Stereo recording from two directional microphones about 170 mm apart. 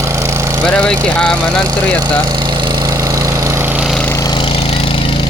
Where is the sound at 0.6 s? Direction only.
5° left (ahead or behind).